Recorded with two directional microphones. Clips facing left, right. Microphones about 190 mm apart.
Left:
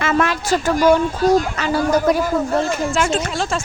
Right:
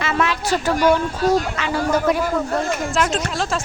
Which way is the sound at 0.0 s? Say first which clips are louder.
Left 3 dB; 50° left (ahead or behind).